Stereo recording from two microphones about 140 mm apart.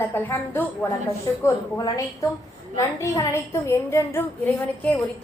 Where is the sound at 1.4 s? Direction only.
25° left (ahead or behind).